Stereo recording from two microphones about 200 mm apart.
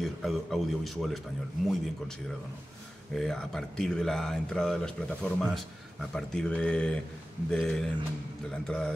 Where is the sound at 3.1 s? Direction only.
Centre (ahead or behind).